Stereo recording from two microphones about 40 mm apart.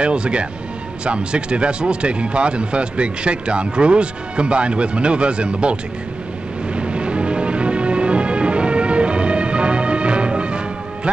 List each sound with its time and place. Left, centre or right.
0.0 s speech: right
6.7 s music: right